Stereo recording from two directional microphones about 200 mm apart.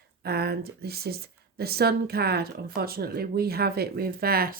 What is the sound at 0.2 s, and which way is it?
Speech, 50° right (ahead or behind).